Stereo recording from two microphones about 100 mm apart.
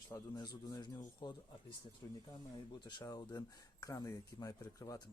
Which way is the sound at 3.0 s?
40° left (ahead or behind).